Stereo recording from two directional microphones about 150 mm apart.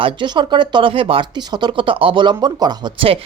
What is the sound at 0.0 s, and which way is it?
Speech, 30° right (ahead or behind).